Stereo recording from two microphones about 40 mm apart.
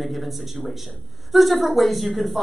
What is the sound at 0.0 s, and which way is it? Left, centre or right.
Speech, centre.